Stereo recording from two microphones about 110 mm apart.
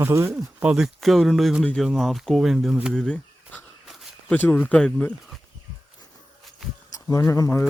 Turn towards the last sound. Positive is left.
turn(degrees=30)  # may be behind; listen again after turning